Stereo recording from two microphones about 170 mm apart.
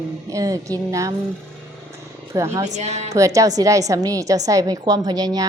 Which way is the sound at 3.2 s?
20° right (ahead or behind).